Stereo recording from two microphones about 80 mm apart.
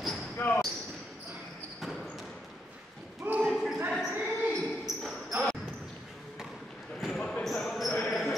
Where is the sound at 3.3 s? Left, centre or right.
Right.